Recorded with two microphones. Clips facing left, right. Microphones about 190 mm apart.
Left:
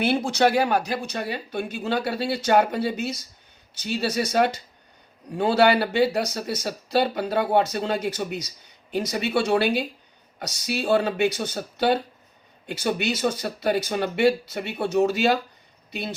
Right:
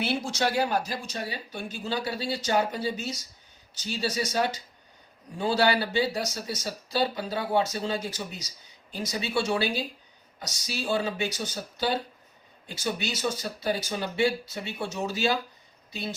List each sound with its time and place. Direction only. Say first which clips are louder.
0.0 s speech: left 7 dB; 55° left (ahead or behind)